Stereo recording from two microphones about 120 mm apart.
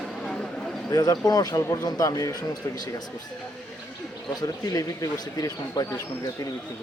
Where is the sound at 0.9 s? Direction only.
30° left (ahead or behind).